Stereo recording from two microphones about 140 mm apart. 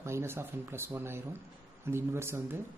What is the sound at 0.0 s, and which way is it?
A man's voice, 20° right (ahead or behind).